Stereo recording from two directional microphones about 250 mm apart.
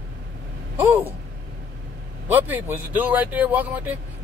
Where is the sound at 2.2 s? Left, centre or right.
Centre.